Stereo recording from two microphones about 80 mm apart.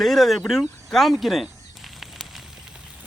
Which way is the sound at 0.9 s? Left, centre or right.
Centre.